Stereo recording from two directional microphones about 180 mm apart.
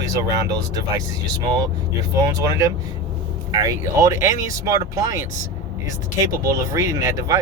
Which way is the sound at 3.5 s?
20° right (ahead or behind).